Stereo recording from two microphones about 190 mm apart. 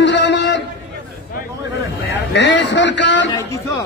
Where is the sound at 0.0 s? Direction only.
65° left (ahead or behind).